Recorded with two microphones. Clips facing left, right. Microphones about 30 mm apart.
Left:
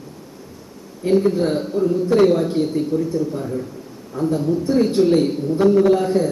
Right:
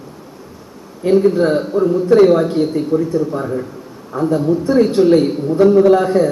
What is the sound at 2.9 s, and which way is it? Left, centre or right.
A woman's voice, right.